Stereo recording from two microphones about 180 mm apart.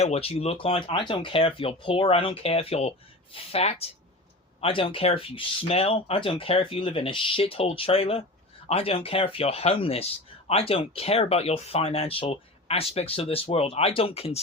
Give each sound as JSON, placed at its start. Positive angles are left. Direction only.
{"t": 0.0, "sound": "speech", "side_deg": 35}